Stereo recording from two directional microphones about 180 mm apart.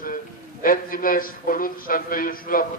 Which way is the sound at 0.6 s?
50° left (ahead or behind).